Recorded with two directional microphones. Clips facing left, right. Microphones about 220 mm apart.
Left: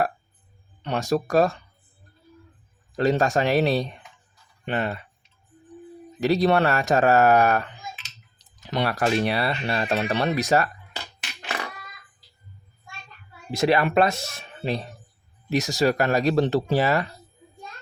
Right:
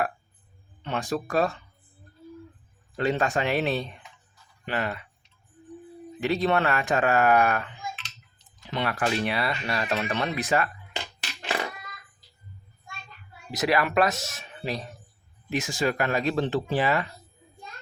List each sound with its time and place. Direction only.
0.9 s speech: 40° left (ahead or behind)
2.9 s speech: 40° left (ahead or behind)
4.6 s speech: 25° left (ahead or behind)
6.1 s speech: 40° left (ahead or behind)
13.5 s speech: 30° left (ahead or behind)